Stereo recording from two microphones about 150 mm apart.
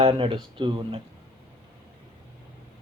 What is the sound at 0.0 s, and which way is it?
Speech, 35° right (ahead or behind).